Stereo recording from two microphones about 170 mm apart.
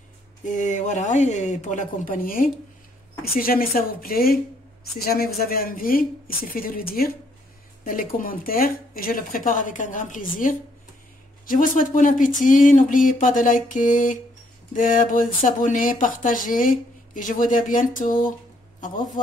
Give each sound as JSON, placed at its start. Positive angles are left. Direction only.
{"t": 0.5, "sound": "a woman's voice", "side_deg": 45}